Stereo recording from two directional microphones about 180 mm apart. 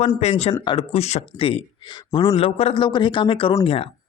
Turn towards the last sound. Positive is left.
turn(degrees=30)  # may be behind; listen again after turning